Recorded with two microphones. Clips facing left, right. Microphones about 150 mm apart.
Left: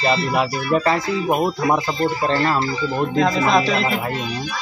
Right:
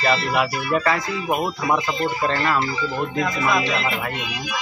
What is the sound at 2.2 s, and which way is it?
Speech, 30° left (ahead or behind).